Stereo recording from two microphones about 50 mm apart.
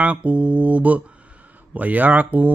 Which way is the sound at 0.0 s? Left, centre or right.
Right.